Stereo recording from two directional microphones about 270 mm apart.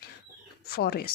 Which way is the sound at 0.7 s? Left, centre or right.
Left.